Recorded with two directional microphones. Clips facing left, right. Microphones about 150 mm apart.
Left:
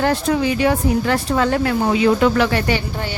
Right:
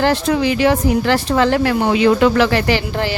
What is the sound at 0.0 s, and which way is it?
Speech, 90° right.